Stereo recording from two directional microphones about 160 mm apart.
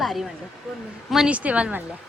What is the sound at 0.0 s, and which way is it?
Speech, centre (ahead or behind).